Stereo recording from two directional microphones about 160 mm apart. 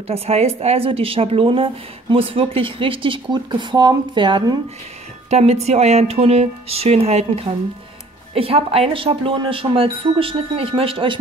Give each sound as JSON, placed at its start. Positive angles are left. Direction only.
{"t": 0.1, "sound": "a woman's voice", "side_deg": -40}
{"t": 5.3, "sound": "a woman's voice", "side_deg": -40}